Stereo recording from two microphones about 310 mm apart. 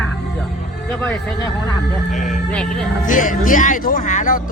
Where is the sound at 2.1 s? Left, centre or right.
Left.